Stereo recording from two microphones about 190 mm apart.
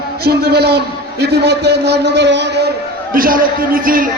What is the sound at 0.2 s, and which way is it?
A man's voice, 55° right (ahead or behind).